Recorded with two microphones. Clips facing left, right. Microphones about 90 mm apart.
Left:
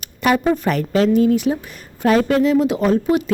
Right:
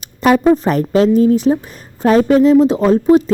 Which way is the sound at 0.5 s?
35° right (ahead or behind).